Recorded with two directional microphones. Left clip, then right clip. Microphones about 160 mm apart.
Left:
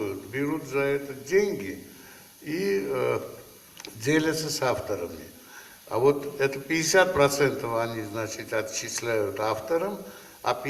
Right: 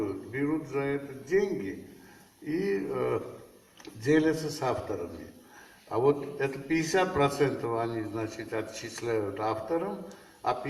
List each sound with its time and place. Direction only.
0.3 s speech: 30° left (ahead or behind)
2.5 s a man's voice: 30° left (ahead or behind)